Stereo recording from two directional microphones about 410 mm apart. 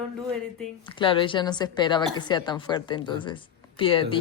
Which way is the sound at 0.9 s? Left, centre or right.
Centre.